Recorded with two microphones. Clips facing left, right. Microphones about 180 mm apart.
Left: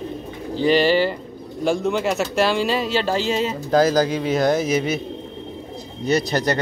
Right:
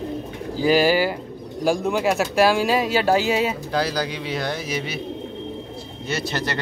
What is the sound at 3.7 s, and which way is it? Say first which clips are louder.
Speech: left 7 dB; 45° left (ahead or behind).